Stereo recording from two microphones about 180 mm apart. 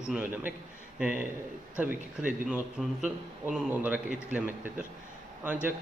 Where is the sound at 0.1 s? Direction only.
10° right (ahead or behind).